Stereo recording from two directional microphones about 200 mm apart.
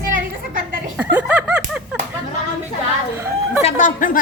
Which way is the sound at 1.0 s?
5° right (ahead or behind).